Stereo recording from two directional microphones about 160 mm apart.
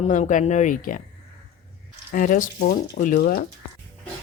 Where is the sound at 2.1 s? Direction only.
60° left (ahead or behind).